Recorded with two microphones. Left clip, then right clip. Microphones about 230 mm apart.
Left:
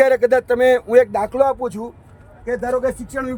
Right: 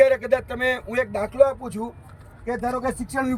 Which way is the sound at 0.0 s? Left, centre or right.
Centre.